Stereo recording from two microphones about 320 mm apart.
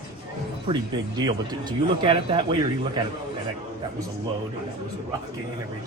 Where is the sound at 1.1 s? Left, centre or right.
Centre.